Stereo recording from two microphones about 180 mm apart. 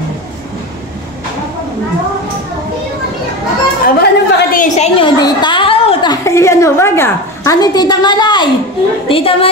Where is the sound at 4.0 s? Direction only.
60° left (ahead or behind).